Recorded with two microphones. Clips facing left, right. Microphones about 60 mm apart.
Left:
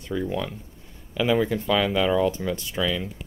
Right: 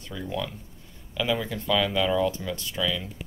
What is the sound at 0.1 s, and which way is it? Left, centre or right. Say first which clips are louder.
Speech: left 5 dB; left.